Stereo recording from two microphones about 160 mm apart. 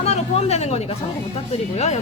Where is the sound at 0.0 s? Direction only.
40° left (ahead or behind).